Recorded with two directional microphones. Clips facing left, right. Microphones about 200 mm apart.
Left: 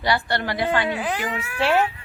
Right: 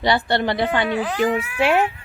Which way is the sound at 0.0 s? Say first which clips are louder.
Right 4 dB; 25° right (ahead or behind).